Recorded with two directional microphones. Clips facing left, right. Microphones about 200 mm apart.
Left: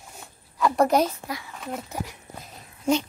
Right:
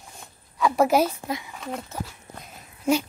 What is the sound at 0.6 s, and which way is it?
A child's voice, centre (ahead or behind).